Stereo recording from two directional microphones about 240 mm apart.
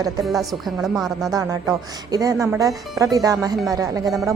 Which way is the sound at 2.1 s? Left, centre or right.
Centre.